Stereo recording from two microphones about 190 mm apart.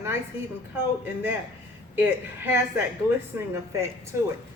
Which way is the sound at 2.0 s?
10° right (ahead or behind).